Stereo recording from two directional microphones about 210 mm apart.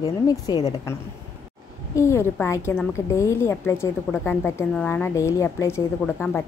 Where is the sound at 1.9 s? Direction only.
10° left (ahead or behind).